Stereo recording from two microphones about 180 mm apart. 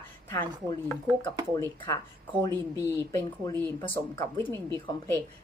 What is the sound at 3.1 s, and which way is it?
Speech, 15° left (ahead or behind).